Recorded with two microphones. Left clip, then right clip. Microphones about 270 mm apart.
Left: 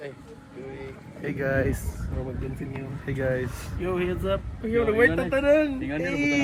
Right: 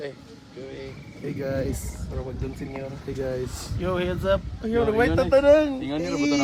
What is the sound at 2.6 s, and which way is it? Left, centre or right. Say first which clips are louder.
Speech: right 2 dB; right.